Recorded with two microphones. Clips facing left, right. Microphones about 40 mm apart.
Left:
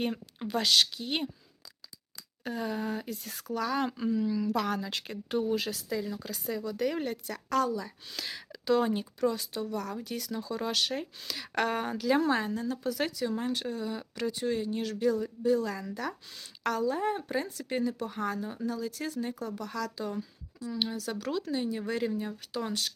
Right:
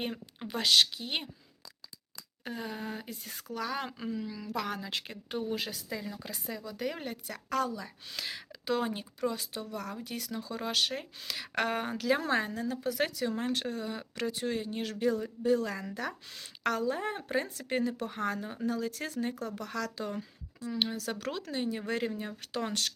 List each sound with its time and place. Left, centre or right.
0.0 s speech: centre
0.5 s speech: right
2.4 s speech: centre
3.8 s speech: centre
4.6 s speech: right
6.5 s speech: centre
7.3 s speech: right
8.8 s speech: centre
9.2 s speech: right
22.4 s speech: right